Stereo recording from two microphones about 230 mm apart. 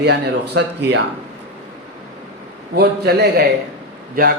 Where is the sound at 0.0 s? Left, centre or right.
Right.